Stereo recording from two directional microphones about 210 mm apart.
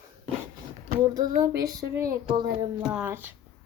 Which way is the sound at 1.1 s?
15° right (ahead or behind).